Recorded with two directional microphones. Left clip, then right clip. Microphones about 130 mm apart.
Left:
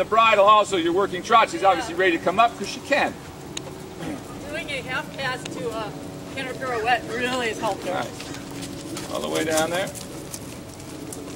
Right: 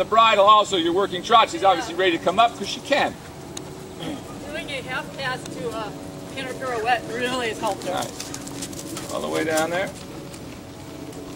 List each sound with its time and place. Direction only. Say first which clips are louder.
0.0 s a man's voice: right 1 dB; 25° right (ahead or behind)
1.5 s speech: right 1 dB; 10° right (ahead or behind)
2.0 s a man's voice: even; 25° right (ahead or behind)
4.5 s speech: left 1 dB; centre (ahead or behind)
9.3 s speech: even; 5° right (ahead or behind)